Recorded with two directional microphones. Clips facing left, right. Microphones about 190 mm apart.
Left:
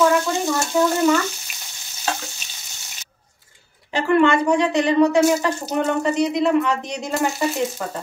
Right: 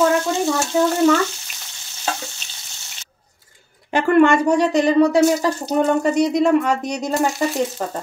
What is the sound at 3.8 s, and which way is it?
Speech, 50° right (ahead or behind).